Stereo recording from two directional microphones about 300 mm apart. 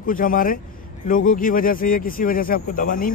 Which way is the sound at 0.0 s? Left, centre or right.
Left.